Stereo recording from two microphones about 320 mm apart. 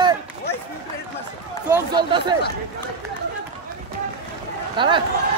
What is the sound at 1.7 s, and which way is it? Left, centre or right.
Speech, centre.